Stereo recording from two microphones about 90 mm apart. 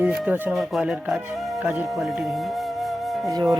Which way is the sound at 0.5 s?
5° right (ahead or behind).